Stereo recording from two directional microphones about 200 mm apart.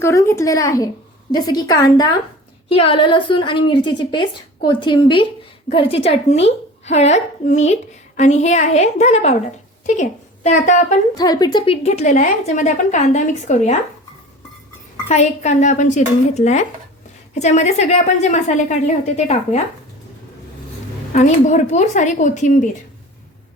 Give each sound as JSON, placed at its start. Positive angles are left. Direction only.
{"t": 0.0, "sound": "a woman's voice", "side_deg": 15}
{"t": 11.1, "sound": "a woman's voice", "side_deg": 20}
{"t": 15.1, "sound": "a woman's voice", "side_deg": 35}
{"t": 21.1, "sound": "a woman's voice", "side_deg": 35}